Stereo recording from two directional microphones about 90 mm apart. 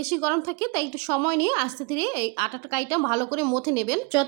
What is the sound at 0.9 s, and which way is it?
A woman's voice, 25° left (ahead or behind).